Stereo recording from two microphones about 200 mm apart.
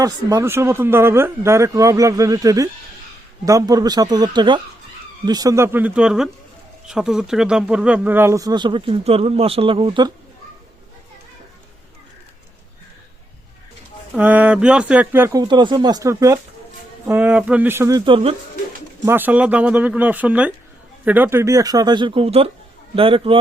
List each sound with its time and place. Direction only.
0.0 s speech: 15° right (ahead or behind)
14.2 s speech: 10° right (ahead or behind); by 18.3 s 25° right (ahead or behind)
19.0 s speech: 10° right (ahead or behind); by 23.4 s 25° right (ahead or behind)